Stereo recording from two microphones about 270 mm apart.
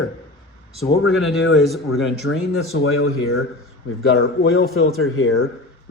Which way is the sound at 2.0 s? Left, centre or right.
Left.